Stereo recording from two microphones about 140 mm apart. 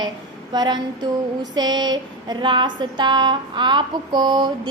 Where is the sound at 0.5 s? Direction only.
30° right (ahead or behind).